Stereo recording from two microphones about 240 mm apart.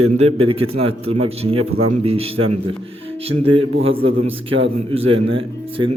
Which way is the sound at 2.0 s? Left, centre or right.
Right.